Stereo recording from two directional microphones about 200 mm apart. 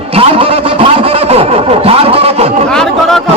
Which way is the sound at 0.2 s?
30° right (ahead or behind).